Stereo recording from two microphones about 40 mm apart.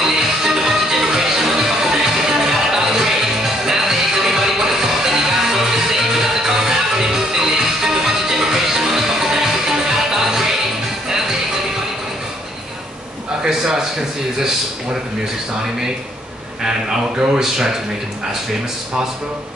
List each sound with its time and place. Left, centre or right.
0.0 s music: centre
13.4 s a sound: centre
17.4 s speech: centre